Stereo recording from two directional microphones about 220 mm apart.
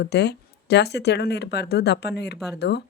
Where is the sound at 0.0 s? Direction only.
50° left (ahead or behind).